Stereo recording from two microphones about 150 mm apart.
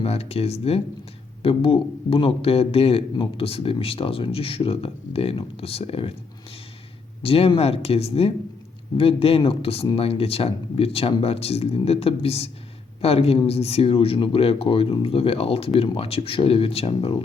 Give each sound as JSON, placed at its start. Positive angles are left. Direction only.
{"t": 0.0, "sound": "speech", "side_deg": 45}
{"t": 7.2, "sound": "speech", "side_deg": 40}